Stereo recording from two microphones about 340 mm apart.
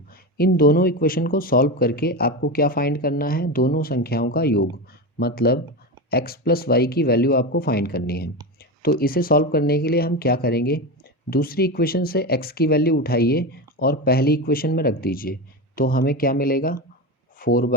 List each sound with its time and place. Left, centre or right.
0.3 s speech: left